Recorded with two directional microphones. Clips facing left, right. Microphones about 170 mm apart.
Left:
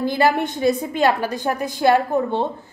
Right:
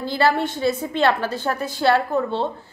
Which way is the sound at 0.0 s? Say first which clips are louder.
Left 2 dB; 15° left (ahead or behind).